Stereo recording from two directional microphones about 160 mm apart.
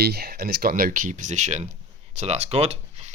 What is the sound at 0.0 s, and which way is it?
Speech, 75° right (ahead or behind).